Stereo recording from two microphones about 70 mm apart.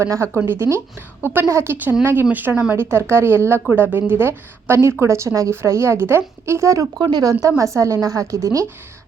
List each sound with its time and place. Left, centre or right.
0.0 s a woman's voice: right
7.0 s speech: right
7.6 s a woman's voice: right